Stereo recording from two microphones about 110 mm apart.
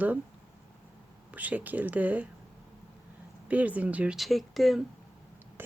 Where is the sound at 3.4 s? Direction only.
15° right (ahead or behind).